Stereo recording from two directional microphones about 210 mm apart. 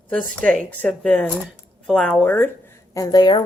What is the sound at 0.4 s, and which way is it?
A woman's voice, 5° left (ahead or behind).